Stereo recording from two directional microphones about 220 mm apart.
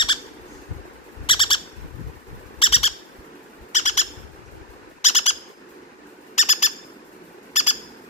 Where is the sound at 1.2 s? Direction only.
20° left (ahead or behind).